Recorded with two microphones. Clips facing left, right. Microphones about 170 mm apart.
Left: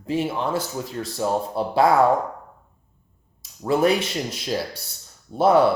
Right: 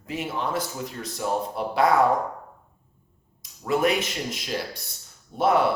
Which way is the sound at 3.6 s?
30° left (ahead or behind).